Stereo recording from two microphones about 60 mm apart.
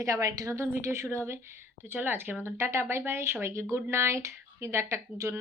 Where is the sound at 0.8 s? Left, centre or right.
Right.